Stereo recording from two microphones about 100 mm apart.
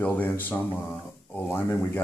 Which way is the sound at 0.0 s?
15° left (ahead or behind).